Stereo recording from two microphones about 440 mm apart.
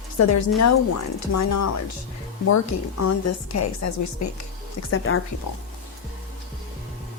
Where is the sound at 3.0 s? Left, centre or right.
Left.